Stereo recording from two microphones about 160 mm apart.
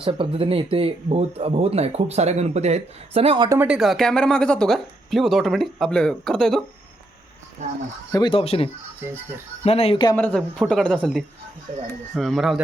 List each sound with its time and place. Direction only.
0.0 s speech: 35° right (ahead or behind)
3.6 s speech: 5° right (ahead or behind)
8.1 s speech: 30° left (ahead or behind)
10.2 s speech: 10° left (ahead or behind)